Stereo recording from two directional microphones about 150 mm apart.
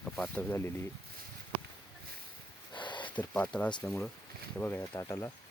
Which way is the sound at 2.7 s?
30° left (ahead or behind).